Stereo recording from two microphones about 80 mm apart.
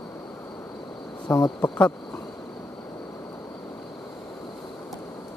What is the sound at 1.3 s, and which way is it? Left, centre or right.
Speech, left.